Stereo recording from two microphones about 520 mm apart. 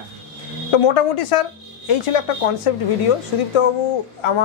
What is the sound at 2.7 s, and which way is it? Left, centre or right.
Speech, left.